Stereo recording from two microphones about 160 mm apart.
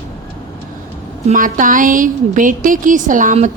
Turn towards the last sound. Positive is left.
turn(degrees=-50)  # may be behind; listen again after turning